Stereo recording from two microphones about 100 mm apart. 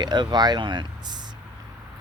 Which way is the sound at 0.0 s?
45° right (ahead or behind).